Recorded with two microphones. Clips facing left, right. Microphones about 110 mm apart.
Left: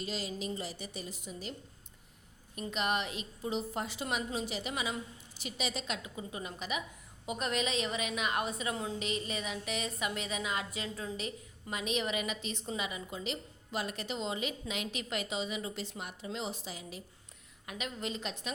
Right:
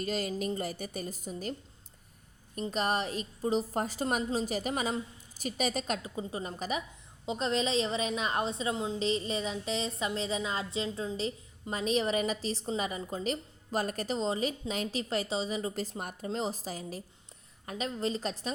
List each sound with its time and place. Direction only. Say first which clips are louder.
0.0 s a woman's voice: right 5 dB; 50° right (ahead or behind)
2.6 s a woman's voice: right 3 dB; 35° right (ahead or behind)